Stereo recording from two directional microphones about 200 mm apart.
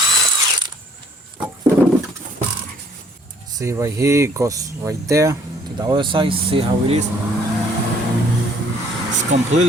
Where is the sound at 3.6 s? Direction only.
15° right (ahead or behind).